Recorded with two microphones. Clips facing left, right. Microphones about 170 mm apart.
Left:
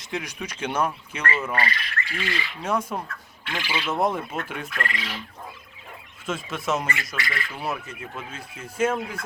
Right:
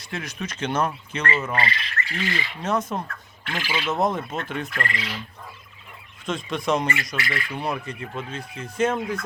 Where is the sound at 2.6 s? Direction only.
10° left (ahead or behind).